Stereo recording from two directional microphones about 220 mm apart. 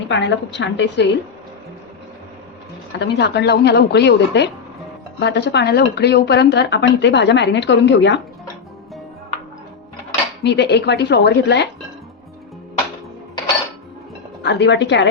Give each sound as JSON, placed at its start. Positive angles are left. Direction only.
{"t": 0.1, "sound": "a woman's voice", "side_deg": 55}
{"t": 3.0, "sound": "speech", "side_deg": 50}
{"t": 10.4, "sound": "speech", "side_deg": 50}
{"t": 14.4, "sound": "speech", "side_deg": 50}